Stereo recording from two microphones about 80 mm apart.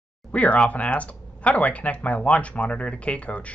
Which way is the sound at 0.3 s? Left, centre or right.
Centre.